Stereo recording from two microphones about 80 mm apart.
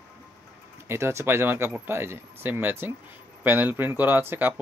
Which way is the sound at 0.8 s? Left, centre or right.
Right.